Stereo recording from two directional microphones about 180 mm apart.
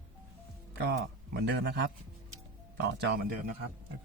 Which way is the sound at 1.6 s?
65° right (ahead or behind).